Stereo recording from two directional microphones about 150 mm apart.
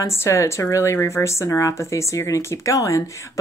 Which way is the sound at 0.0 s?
20° left (ahead or behind).